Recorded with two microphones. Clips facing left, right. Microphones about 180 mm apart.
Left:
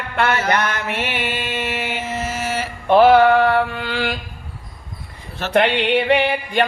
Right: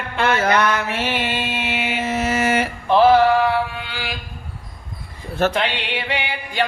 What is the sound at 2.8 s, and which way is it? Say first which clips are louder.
Mantra: left 2 dB; 60° left (ahead or behind).